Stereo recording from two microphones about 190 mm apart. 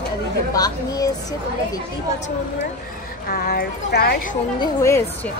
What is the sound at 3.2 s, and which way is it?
Speech, 50° left (ahead or behind).